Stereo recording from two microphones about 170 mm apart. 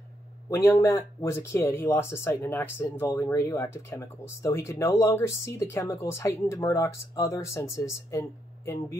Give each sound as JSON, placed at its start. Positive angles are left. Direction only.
{"t": 0.5, "sound": "speech", "side_deg": 15}